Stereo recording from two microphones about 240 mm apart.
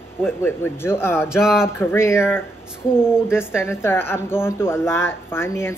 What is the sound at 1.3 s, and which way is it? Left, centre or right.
Speech, centre.